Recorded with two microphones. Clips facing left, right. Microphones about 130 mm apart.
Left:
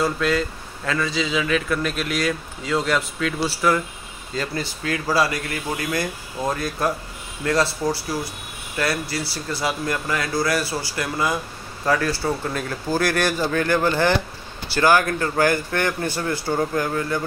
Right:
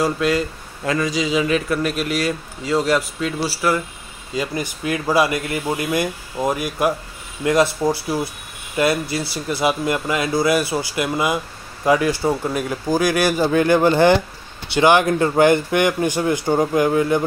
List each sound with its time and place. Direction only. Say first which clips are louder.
0.0 s speech: right 2 dB; 10° right (ahead or behind)